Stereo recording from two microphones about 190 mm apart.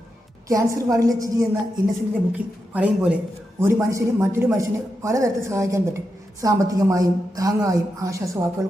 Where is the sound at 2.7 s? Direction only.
5° right (ahead or behind).